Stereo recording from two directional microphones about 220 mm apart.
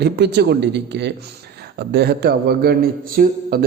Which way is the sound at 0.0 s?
50° right (ahead or behind).